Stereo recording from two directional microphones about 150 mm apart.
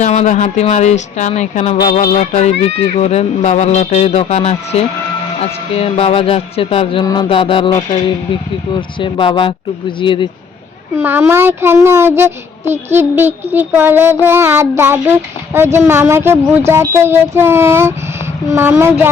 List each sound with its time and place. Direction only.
0.0 s speech: 50° left (ahead or behind)
5.4 s music: 40° left (ahead or behind)
7.0 s music: 25° left (ahead or behind)
10.9 s speech: 15° right (ahead or behind)